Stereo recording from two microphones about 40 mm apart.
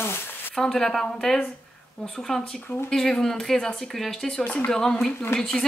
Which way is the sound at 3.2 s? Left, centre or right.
Centre.